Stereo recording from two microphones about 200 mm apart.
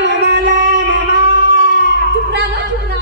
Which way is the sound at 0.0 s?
60° right (ahead or behind).